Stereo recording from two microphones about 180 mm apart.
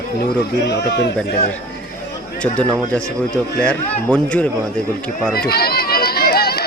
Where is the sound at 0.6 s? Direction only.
75° left (ahead or behind).